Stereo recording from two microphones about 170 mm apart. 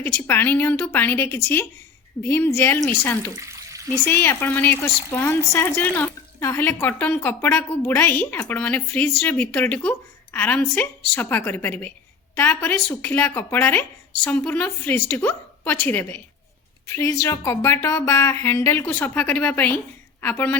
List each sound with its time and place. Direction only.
0.0 s speech: 15° left (ahead or behind)
3.3 s water: 20° right (ahead or behind)
4.0 s speech: 15° left (ahead or behind)